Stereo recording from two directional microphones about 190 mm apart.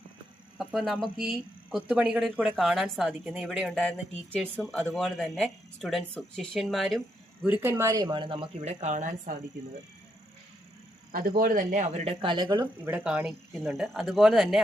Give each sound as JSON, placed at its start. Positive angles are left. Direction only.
{"t": 0.6, "sound": "speech", "side_deg": -5}
{"t": 7.4, "sound": "speech", "side_deg": -10}
{"t": 11.1, "sound": "speech", "side_deg": -50}
{"t": 13.0, "sound": "speech", "side_deg": -5}